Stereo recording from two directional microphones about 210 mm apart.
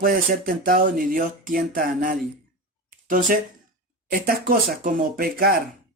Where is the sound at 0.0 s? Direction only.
45° right (ahead or behind).